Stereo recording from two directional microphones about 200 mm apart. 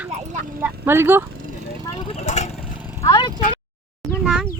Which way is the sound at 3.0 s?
20° left (ahead or behind).